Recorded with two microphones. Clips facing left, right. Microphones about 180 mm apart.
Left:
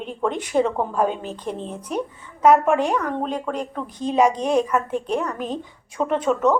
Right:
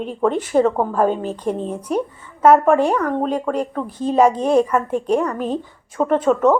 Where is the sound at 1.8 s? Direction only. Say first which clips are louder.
Right 5 dB; 10° right (ahead or behind).